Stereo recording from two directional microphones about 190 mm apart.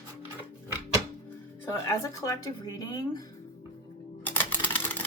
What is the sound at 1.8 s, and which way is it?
Speech, 15° left (ahead or behind).